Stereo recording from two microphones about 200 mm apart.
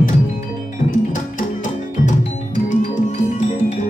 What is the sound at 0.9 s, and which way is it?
Music, 40° left (ahead or behind).